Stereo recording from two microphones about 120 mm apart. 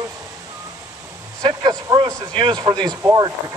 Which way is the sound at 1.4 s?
35° right (ahead or behind).